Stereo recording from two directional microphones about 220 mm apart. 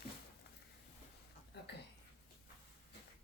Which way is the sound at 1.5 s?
50° left (ahead or behind).